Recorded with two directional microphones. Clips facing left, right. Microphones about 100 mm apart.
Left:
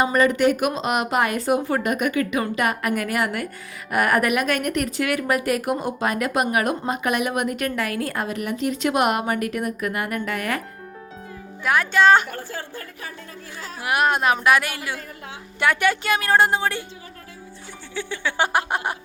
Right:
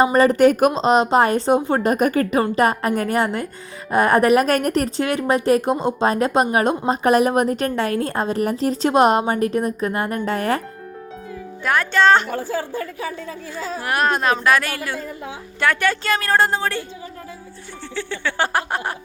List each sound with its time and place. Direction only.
0.0 s a woman's voice: 30° right (ahead or behind)
11.6 s a woman's voice: 5° left (ahead or behind)
13.8 s a woman's voice: 15° left (ahead or behind)
17.9 s a woman's voice: 15° left (ahead or behind)